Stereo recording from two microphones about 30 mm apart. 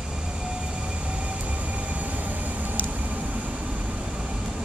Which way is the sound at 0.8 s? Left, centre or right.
Right.